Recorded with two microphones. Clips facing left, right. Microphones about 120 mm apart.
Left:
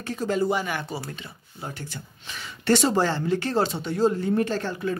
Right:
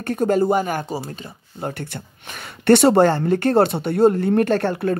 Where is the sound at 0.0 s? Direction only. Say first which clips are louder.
Right 7 dB; 55° right (ahead or behind).